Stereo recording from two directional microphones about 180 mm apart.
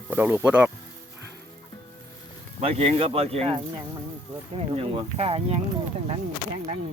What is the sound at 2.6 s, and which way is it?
Speech, 35° right (ahead or behind).